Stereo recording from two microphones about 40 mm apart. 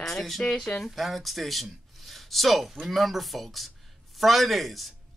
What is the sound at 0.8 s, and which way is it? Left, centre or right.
A man's voice, centre.